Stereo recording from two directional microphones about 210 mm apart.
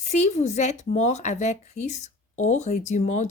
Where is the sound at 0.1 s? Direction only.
35° left (ahead or behind).